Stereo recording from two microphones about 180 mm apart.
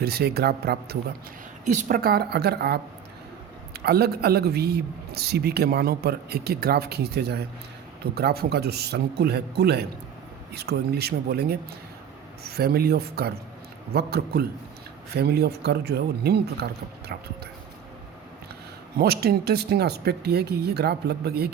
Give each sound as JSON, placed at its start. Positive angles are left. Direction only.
{"t": 0.0, "sound": "a man's voice", "side_deg": -60}
{"t": 1.6, "sound": "a man's voice", "side_deg": -50}
{"t": 3.8, "sound": "a man's voice", "side_deg": -60}
{"t": 18.9, "sound": "a man's voice", "side_deg": -60}